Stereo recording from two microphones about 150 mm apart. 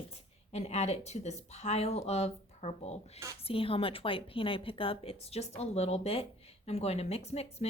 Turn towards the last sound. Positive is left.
turn(degrees=45)  # may be behind; listen again after turning